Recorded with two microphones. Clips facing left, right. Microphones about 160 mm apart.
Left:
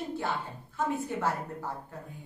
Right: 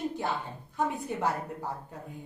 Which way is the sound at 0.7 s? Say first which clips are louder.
Even; 15° right (ahead or behind).